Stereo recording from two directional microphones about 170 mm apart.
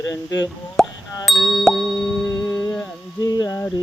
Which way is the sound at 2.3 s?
20° left (ahead or behind).